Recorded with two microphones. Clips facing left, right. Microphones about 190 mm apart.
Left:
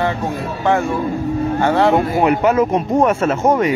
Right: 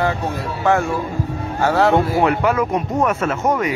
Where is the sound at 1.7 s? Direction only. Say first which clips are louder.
Right 1 dB; 5° right (ahead or behind).